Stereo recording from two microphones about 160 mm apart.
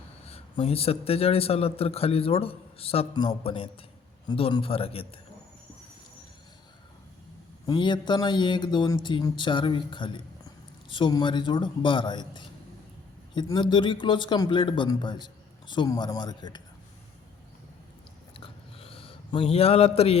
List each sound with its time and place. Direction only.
0.3 s a man's voice: 35° left (ahead or behind)
7.7 s a man's voice: 30° left (ahead or behind)
18.3 s a sound: 35° left (ahead or behind)